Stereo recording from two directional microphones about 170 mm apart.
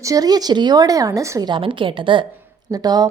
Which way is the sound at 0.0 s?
20° right (ahead or behind).